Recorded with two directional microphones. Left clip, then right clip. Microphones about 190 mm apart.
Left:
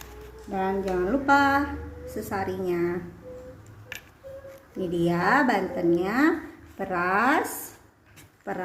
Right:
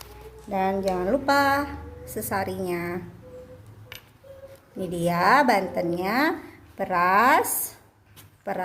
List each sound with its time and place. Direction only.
0.5 s a woman's voice: 35° right (ahead or behind)
4.8 s a woman's voice: 30° right (ahead or behind)